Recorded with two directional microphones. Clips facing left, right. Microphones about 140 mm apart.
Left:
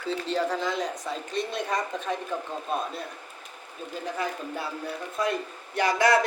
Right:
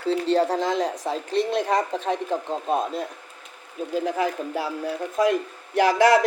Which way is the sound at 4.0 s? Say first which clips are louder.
Right 7 dB; 90° right.